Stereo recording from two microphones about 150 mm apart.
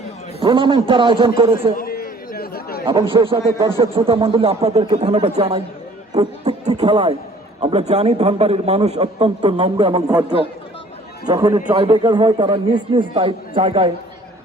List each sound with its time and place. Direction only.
0.3 s a man's voice: 35° right (ahead or behind)
1.7 s chatter: 80° left
2.8 s a man's voice: 35° right (ahead or behind)
6.1 s music: 45° right (ahead or behind)
6.9 s a man's voice: 35° right (ahead or behind)
7.6 s a man's voice: 45° right (ahead or behind)
11.3 s a man's voice: 30° right (ahead or behind)